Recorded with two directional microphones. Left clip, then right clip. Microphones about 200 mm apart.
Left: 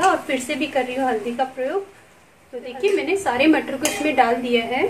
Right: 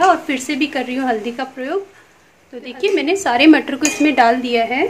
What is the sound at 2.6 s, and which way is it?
A woman's voice, 35° right (ahead or behind).